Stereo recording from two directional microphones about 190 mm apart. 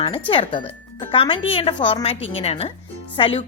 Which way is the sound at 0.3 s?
25° left (ahead or behind).